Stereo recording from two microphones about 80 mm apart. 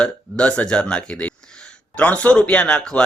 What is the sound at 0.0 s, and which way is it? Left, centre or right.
Speech, centre.